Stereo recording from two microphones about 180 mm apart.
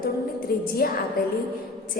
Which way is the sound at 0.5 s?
55° left (ahead or behind).